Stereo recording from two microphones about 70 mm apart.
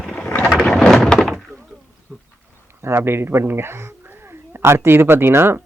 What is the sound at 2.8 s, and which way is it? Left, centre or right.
Speech, right.